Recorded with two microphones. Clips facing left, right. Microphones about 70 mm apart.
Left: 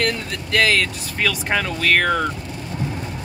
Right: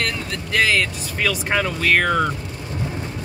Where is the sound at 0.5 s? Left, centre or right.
Centre.